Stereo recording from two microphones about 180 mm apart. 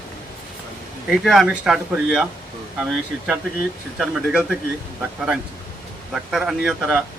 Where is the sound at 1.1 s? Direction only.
Centre (ahead or behind).